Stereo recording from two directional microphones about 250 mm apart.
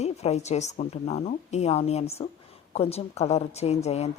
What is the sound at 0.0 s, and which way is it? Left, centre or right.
A woman's voice, left.